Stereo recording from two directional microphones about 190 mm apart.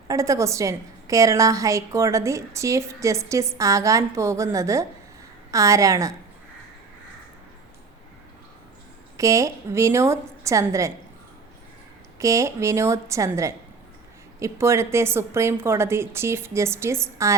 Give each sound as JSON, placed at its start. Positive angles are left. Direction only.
{"t": 0.1, "sound": "a woman's voice", "side_deg": -15}
{"t": 9.1, "sound": "a woman's voice", "side_deg": -15}
{"t": 12.2, "sound": "a woman's voice", "side_deg": -15}